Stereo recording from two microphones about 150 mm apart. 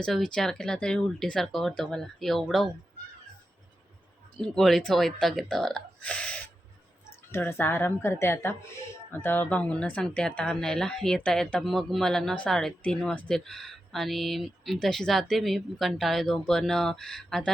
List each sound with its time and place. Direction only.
0.0 s speech: 5° left (ahead or behind)
4.4 s a woman's voice: centre (ahead or behind)